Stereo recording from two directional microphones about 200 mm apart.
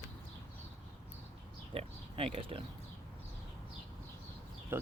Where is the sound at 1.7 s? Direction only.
30° right (ahead or behind).